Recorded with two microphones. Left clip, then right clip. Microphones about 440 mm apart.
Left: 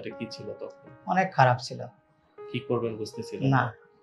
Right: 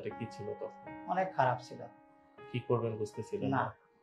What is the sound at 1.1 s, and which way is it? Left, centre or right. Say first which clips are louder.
Speech: left 9 dB; left.